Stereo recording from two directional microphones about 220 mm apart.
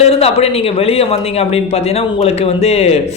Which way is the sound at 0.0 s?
25° left (ahead or behind).